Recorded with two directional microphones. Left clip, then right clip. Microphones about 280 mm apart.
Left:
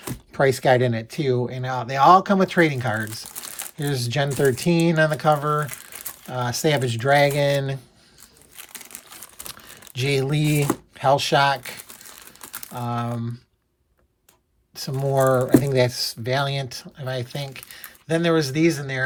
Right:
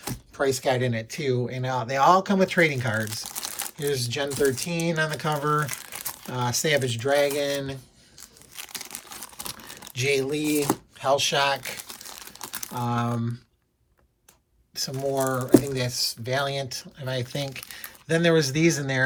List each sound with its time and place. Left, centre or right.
0.3 s speech: left
3.1 s crumpling: centre
3.8 s speech: centre
8.5 s crumpling: centre
9.9 s a sound: centre
10.9 s speech: left
11.8 s crumpling: centre
12.8 s speech: centre
14.8 s speech: left; by 19.0 s centre